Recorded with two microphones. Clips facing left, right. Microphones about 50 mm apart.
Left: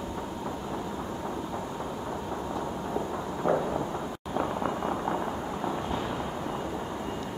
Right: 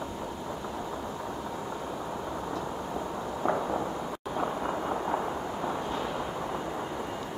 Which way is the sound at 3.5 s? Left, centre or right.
Right.